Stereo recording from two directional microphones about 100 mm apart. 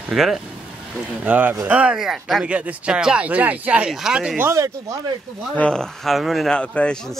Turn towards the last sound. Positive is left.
turn(degrees=10)  # may be behind; listen again after turning